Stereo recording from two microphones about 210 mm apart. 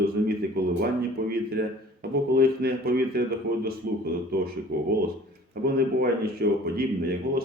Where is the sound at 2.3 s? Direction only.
45° right (ahead or behind).